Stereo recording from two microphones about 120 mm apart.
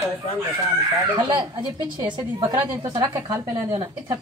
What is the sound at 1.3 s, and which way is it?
A woman's voice, 40° right (ahead or behind).